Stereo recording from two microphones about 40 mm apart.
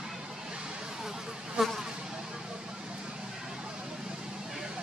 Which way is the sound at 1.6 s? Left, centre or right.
Centre.